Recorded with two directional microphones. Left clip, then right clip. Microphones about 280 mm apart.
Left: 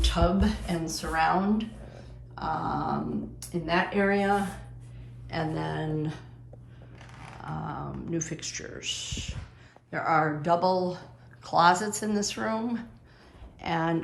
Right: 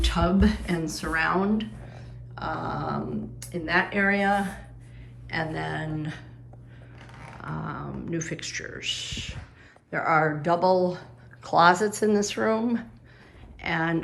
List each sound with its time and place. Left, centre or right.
0.0 s speech: centre
7.4 s speech: centre